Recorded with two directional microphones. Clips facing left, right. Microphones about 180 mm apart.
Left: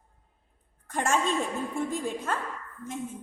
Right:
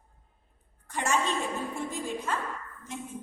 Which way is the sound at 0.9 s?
50° left (ahead or behind).